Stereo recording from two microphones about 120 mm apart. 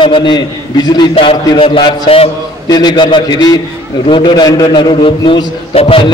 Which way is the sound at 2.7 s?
35° left (ahead or behind).